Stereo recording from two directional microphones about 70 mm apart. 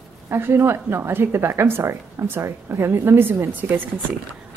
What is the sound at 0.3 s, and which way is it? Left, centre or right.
Speech, right.